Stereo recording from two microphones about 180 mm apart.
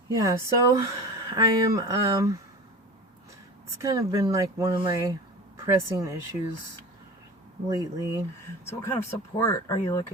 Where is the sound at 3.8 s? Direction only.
20° right (ahead or behind).